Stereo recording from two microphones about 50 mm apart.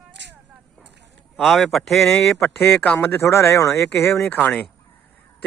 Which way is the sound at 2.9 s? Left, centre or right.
Left.